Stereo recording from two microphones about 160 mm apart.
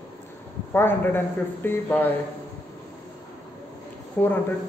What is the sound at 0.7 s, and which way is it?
A man's voice, 15° left (ahead or behind).